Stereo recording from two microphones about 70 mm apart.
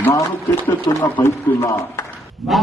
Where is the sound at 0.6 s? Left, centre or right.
Left.